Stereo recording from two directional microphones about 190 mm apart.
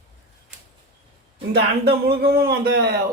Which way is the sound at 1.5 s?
55° right (ahead or behind).